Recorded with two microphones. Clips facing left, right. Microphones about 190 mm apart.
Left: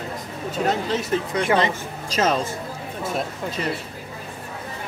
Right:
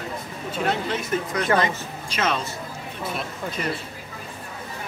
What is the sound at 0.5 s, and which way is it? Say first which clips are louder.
Speech: left 2 dB; 40° left (ahead or behind).